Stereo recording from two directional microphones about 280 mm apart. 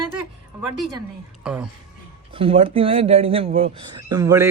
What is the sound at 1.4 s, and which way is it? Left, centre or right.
Speech, centre.